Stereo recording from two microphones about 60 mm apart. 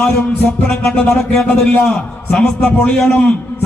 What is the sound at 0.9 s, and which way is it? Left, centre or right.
Speech, centre.